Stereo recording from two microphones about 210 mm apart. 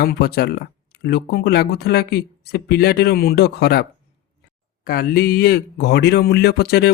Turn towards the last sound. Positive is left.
turn(degrees=50)  # may be behind; listen again after turning